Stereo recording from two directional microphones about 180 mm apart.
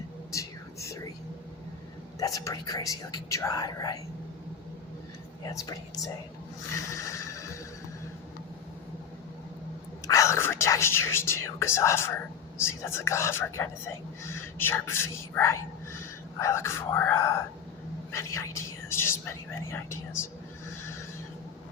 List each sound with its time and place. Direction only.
0.3 s whispering: 15° left (ahead or behind)
2.1 s speech: 20° left (ahead or behind)
5.6 s speech: 20° left (ahead or behind)
6.7 s a sound: 15° left (ahead or behind)
10.1 s whispering: 15° left (ahead or behind)
12.5 s speech: 15° left (ahead or behind)